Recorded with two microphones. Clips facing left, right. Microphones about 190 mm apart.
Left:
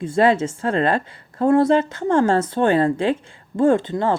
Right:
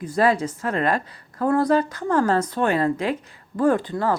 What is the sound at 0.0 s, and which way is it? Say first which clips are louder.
A woman's voice: left 3 dB; 25° left (ahead or behind).